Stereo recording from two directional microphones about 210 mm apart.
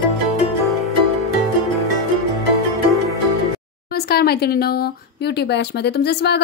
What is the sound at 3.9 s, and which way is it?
Speech, 50° left (ahead or behind).